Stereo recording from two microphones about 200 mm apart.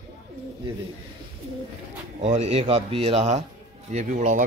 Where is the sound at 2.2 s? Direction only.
30° right (ahead or behind).